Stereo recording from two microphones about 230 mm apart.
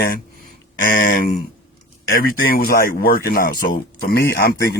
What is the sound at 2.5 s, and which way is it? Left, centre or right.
Speech, left.